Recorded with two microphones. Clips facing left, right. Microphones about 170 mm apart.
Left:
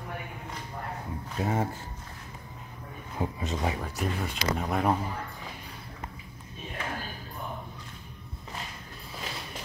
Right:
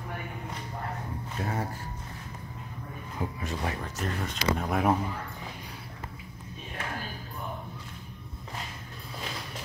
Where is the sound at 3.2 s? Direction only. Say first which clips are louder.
Left 3 dB; 20° left (ahead or behind).